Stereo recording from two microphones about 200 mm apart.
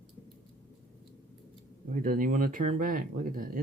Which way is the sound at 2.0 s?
45° right (ahead or behind).